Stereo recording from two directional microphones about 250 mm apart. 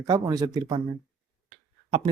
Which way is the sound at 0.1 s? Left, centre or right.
Centre.